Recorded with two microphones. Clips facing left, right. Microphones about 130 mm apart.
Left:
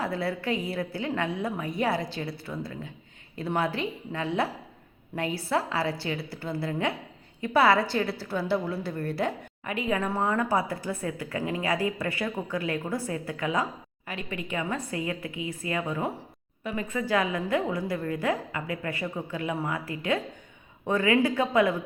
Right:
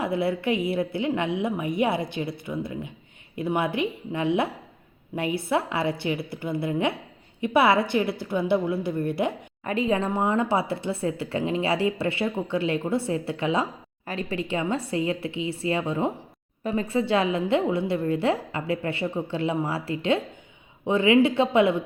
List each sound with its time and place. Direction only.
0.0 s a woman's voice: 20° right (ahead or behind)
9.6 s a woman's voice: 30° right (ahead or behind)
16.6 s a woman's voice: 35° right (ahead or behind)